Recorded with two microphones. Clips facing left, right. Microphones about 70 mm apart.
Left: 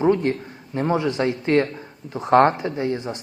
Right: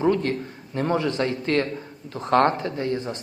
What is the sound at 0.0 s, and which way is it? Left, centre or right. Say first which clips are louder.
A man's voice: left 3 dB; centre.